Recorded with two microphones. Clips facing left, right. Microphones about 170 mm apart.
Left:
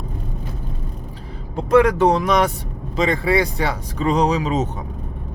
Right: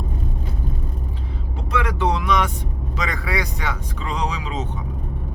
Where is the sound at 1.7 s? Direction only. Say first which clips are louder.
Left 9 dB; 45° left (ahead or behind).